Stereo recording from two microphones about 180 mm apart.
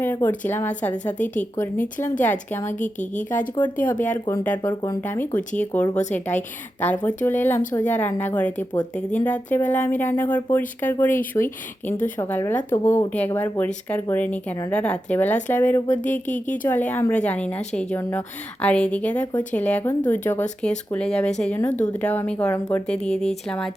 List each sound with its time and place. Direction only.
0.0 s speech: 10° left (ahead or behind)
16.2 s speech: 45° left (ahead or behind)
16.6 s speech: 10° left (ahead or behind)